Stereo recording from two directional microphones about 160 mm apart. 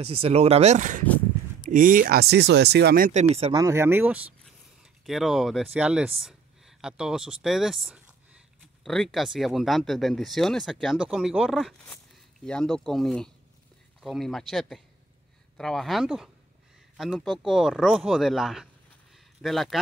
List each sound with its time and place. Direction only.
0.0 s speech: 40° right (ahead or behind); by 3.1 s 80° right
3.1 s speech: 45° right (ahead or behind)
3.5 s speech: 20° right (ahead or behind); by 19.8 s centre (ahead or behind)